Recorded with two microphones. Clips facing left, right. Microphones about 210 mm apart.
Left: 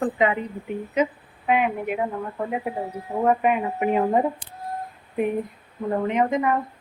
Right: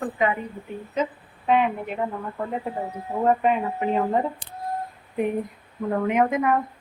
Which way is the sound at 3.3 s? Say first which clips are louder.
Even; 5° left (ahead or behind).